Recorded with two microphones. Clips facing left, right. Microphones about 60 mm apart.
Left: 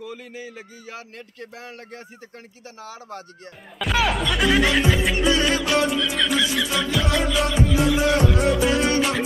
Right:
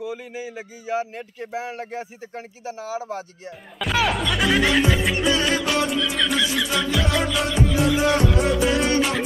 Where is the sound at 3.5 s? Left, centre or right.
Centre.